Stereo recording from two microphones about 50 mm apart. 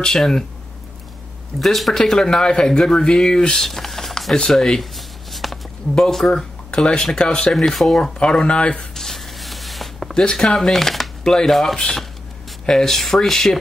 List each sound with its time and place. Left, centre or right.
0.0 s speech: centre
1.6 s speech: centre
4.9 s shuffling cards: centre
5.9 s speech: centre
8.2 s speech: centre
8.9 s a sound: centre
10.3 s speech: centre